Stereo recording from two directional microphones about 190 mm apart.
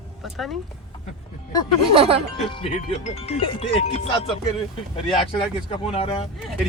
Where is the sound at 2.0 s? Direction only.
30° right (ahead or behind).